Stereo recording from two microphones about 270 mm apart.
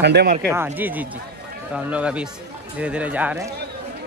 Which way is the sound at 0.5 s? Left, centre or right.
Centre.